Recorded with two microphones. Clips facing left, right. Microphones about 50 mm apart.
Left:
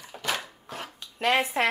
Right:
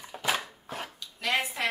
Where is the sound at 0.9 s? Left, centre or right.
Left.